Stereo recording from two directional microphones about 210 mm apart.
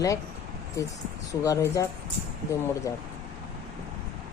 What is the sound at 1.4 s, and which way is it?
Speech, 15° left (ahead or behind).